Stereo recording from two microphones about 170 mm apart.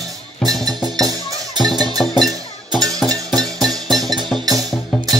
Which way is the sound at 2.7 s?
20° right (ahead or behind).